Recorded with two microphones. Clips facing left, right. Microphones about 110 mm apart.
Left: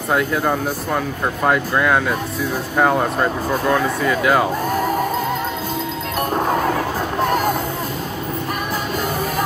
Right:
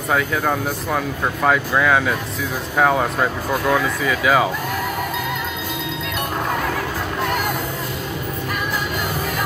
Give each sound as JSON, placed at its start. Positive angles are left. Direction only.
{"t": 0.1, "sound": "speech", "side_deg": 5}
{"t": 6.3, "sound": "music", "side_deg": 35}